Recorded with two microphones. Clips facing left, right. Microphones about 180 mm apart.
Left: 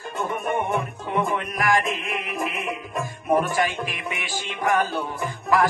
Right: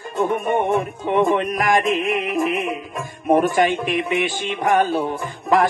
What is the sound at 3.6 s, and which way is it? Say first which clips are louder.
Music: right 7 dB; 25° right (ahead or behind).